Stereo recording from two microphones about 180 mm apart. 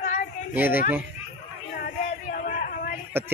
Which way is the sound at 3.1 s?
15° right (ahead or behind).